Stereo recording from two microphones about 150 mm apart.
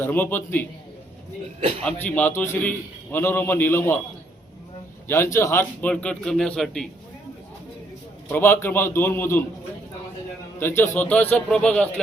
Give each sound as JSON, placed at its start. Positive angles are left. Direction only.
{"t": 0.0, "sound": "a man's voice", "side_deg": 15}
{"t": 1.8, "sound": "a man's voice", "side_deg": 10}
{"t": 5.0, "sound": "a man's voice", "side_deg": 15}
{"t": 8.3, "sound": "a man's voice", "side_deg": 15}
{"t": 10.6, "sound": "a man's voice", "side_deg": 15}